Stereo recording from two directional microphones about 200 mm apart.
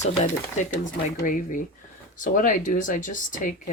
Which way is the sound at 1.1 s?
40° left (ahead or behind).